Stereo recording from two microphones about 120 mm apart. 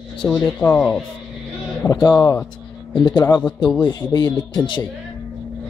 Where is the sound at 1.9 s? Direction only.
35° left (ahead or behind).